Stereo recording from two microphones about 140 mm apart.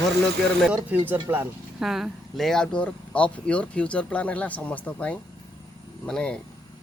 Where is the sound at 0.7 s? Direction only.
10° right (ahead or behind).